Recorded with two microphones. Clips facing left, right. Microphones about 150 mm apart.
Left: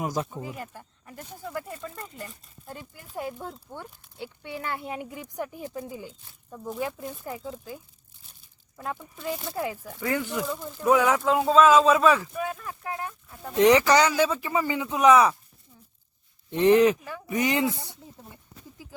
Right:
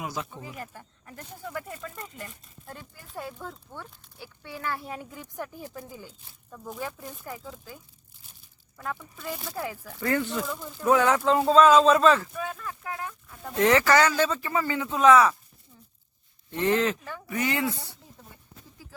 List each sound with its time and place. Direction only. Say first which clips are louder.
0.0 s speech: left 5 dB; 40° left (ahead or behind)
0.3 s speech: left 3 dB; 5° left (ahead or behind); by 7.5 s 25° left (ahead or behind)
8.7 s speech: left 1 dB; 20° left (ahead or behind)
12.8 s speech: left 2 dB; 25° left (ahead or behind)
16.5 s speech: left 6 dB; 20° left (ahead or behind)